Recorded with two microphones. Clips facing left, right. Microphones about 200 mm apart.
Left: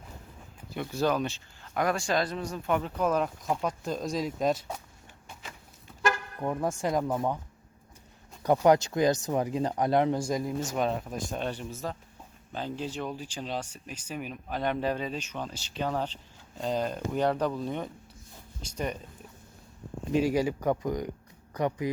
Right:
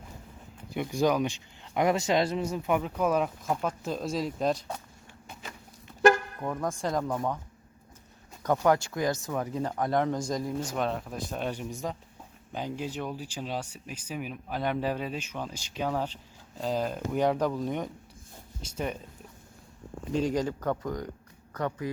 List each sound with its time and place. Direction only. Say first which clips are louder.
0.7 s speech: right 2 dB; 15° right (ahead or behind)
2.6 s speech: left 1 dB; 5° right (ahead or behind)
6.4 s speech: left 2 dB; 10° left (ahead or behind)
8.4 s speech: left 3 dB; 15° left (ahead or behind); by 17.8 s 10° right (ahead or behind)
20.1 s speech: left 2 dB; 10° left (ahead or behind)